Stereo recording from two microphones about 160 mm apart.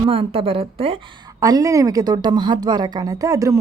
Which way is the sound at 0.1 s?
35° right (ahead or behind).